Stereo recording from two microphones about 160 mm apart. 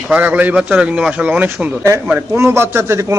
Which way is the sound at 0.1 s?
10° right (ahead or behind).